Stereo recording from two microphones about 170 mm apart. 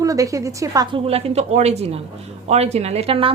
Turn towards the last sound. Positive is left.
turn(degrees=-35)  # may be behind; listen again after turning